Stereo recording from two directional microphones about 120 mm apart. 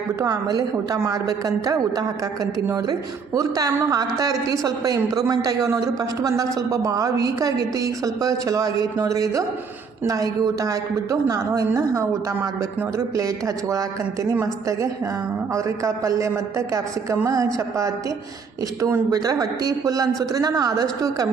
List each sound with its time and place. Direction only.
0.2 s a woman's voice: 30° right (ahead or behind)
13.1 s a man's voice: 30° right (ahead or behind)